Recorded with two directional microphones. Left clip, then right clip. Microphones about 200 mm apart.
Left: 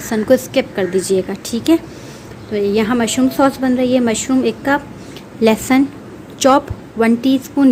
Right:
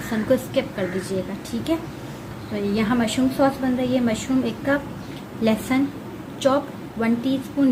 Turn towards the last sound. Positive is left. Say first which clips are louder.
# left 8 dB
turn(degrees=50)  # may be behind; listen again after turning